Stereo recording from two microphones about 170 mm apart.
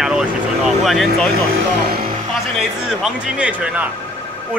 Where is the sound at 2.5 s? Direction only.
5° right (ahead or behind).